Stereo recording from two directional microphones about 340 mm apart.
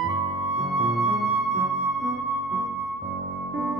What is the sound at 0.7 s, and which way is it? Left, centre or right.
Flute, centre.